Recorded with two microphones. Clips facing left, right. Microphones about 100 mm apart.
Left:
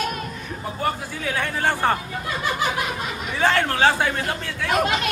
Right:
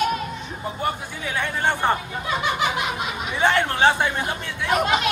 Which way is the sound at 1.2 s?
20° right (ahead or behind).